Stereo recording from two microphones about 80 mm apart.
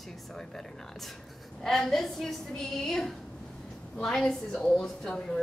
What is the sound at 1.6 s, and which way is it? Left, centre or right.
A woman's voice, centre.